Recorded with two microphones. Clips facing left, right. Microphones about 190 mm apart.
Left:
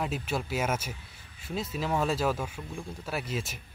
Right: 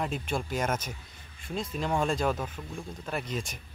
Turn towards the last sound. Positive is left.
turn(degrees=5)  # may be behind; listen again after turning